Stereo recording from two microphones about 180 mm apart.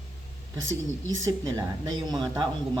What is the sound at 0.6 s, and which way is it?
Speech, 90° right.